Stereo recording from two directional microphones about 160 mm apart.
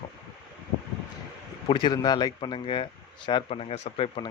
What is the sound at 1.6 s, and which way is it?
Speech, 30° left (ahead or behind).